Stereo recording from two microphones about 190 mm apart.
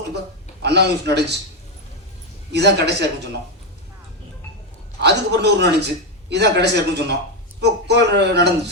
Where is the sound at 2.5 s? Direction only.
60° right (ahead or behind).